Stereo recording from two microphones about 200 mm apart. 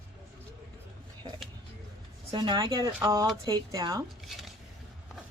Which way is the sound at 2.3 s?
20° right (ahead or behind).